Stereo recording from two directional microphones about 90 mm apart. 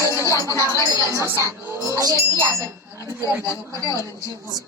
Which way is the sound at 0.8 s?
35° right (ahead or behind).